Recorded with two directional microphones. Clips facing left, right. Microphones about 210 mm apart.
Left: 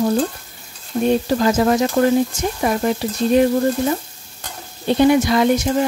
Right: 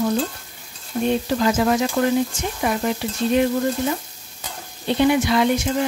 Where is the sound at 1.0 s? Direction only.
40° left (ahead or behind).